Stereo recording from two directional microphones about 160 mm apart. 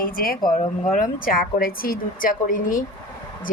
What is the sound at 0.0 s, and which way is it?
Speech, 65° left (ahead or behind).